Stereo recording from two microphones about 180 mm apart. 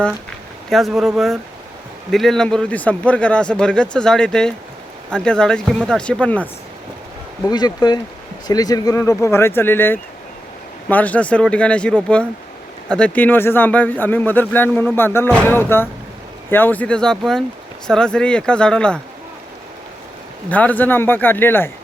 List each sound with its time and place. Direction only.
0.7 s a man's voice: centre (ahead or behind)
7.5 s a man's voice: 25° left (ahead or behind); by 18.9 s 5° left (ahead or behind)
20.5 s speech: 10° left (ahead or behind)